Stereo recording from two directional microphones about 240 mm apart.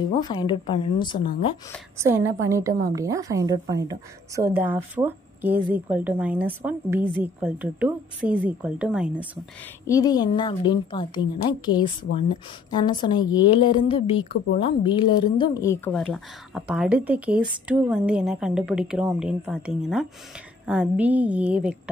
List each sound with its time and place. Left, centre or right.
0.2 s a woman's voice: centre
2.0 s a woman's voice: centre
9.8 s a woman's voice: centre